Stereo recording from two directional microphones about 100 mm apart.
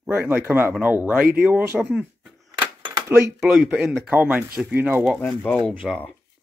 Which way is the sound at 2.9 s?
30° right (ahead or behind).